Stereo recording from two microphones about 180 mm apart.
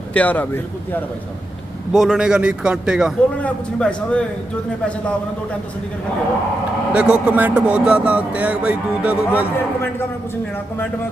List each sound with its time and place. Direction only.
0.1 s speech: 10° left (ahead or behind)
1.9 s speech: 5° right (ahead or behind)
3.4 s speech: 5° left (ahead or behind)
6.9 s speech: 5° right (ahead or behind)